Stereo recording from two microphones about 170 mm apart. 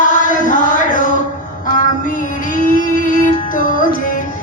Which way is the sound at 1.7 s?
50° left (ahead or behind).